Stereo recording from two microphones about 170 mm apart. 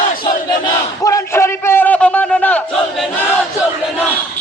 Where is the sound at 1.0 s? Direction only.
20° left (ahead or behind).